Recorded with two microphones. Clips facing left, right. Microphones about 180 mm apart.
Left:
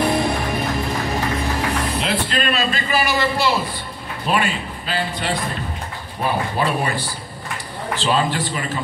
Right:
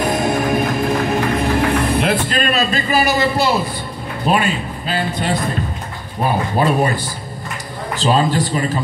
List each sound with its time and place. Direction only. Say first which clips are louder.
0.0 s music: right 2 dB; 45° right (ahead or behind)
4.3 s a man's voice: right 4 dB; 45° right (ahead or behind)
6.6 s a man's voice: right 7 dB; 45° right (ahead or behind)